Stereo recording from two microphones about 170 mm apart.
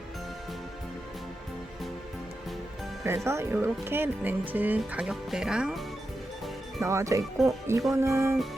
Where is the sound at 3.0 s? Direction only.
15° right (ahead or behind).